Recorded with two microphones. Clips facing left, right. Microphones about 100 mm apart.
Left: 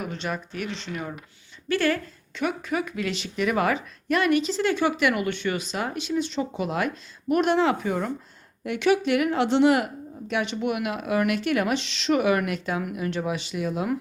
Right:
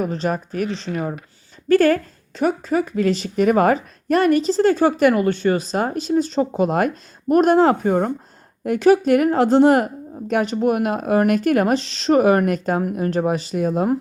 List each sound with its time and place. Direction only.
0.0 s a woman's voice: 40° right (ahead or behind)